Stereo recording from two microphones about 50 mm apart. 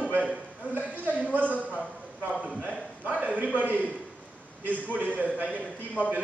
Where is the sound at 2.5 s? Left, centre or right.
Right.